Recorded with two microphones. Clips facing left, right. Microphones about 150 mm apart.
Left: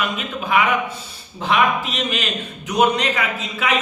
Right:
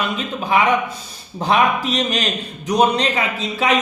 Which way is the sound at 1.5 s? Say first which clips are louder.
Right 2 dB; 40° right (ahead or behind).